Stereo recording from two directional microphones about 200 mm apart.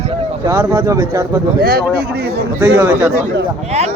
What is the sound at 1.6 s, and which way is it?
Speech, 50° right (ahead or behind).